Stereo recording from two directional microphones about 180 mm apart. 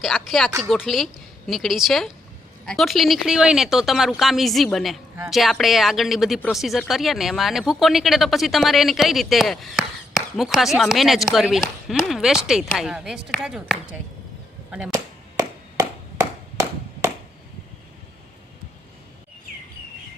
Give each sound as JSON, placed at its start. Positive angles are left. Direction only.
{"t": 0.0, "sound": "speech", "side_deg": 0}
{"t": 14.9, "sound": "chop", "side_deg": -15}